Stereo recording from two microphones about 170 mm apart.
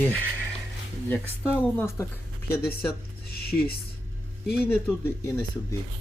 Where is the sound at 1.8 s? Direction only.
15° left (ahead or behind).